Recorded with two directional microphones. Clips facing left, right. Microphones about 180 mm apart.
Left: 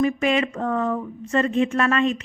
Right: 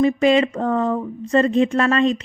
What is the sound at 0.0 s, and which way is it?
Speech, 30° right (ahead or behind).